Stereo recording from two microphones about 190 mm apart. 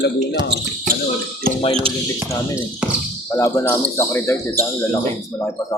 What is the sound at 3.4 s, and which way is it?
Speech, 15° left (ahead or behind).